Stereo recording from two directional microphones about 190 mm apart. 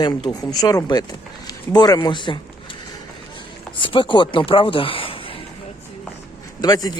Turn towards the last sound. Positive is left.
turn(degrees=20)  # may be behind; listen again after turning